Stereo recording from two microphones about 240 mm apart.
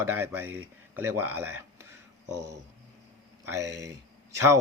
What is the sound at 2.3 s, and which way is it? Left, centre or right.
Speech, right.